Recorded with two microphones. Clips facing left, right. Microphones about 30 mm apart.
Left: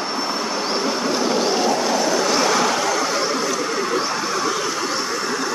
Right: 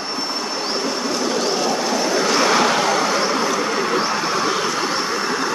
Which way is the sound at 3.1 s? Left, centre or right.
Right.